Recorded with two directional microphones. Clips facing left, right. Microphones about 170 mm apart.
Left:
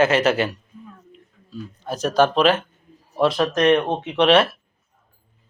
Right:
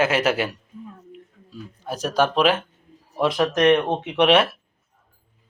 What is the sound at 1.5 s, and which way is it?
A man's voice, 10° right (ahead or behind).